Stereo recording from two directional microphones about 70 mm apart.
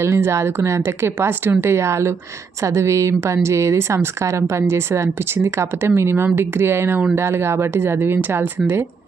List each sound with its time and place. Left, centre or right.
0.0 s a woman's voice: right